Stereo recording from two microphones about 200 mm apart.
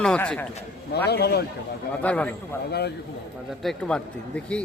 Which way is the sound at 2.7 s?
55° left (ahead or behind).